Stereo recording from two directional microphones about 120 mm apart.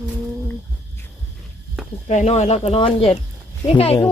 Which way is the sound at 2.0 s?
75° left (ahead or behind).